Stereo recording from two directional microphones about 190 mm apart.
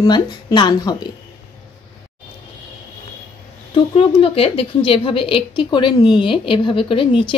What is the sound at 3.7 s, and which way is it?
A woman's voice, 30° left (ahead or behind).